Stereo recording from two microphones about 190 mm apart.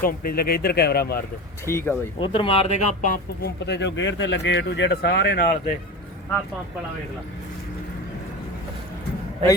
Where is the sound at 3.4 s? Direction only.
65° left (ahead or behind).